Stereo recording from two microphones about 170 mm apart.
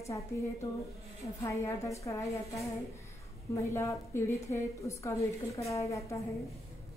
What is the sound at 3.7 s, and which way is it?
A woman's voice, 15° left (ahead or behind).